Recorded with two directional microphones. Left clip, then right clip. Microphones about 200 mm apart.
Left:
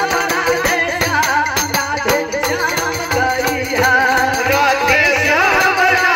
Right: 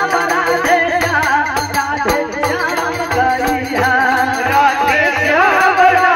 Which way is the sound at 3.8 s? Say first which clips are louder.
Left 1 dB; 35° right (ahead or behind).